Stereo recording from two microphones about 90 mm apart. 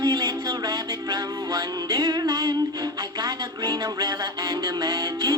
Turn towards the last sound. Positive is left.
turn(degrees=-45)  # may be behind; listen again after turning